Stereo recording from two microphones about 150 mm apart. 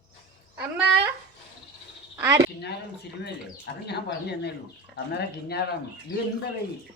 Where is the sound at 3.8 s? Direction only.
90° left.